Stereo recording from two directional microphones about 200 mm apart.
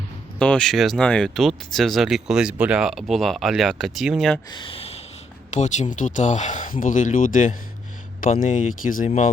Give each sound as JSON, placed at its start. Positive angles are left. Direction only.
{"t": 0.3, "sound": "speech", "side_deg": 5}
{"t": 4.5, "sound": "speech", "side_deg": 25}